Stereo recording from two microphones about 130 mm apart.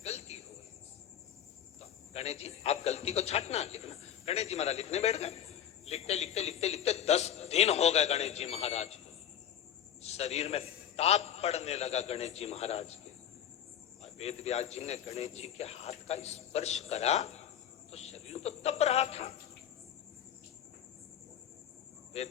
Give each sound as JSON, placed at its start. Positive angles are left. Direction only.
{"t": 0.0, "sound": "a sound", "side_deg": 55}
{"t": 2.1, "sound": "speech", "side_deg": 55}
{"t": 10.0, "sound": "speech", "side_deg": 55}
{"t": 14.0, "sound": "speech", "side_deg": 55}
{"t": 22.1, "sound": "a man's voice", "side_deg": 55}